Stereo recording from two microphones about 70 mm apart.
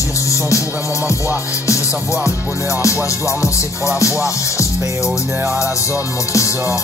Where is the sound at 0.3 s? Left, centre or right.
Left.